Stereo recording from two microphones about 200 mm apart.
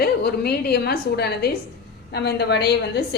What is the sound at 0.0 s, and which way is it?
A woman's voice, 50° left (ahead or behind).